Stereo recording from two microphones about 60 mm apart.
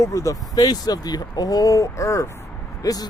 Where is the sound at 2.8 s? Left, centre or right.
Left.